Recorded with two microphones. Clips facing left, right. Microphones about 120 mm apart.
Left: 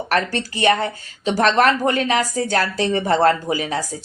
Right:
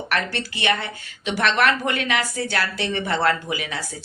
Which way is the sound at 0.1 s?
40° left (ahead or behind).